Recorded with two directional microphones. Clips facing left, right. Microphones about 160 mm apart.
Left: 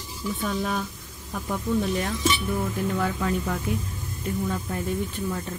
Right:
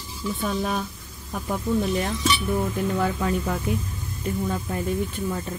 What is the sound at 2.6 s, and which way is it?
Speech, 20° right (ahead or behind).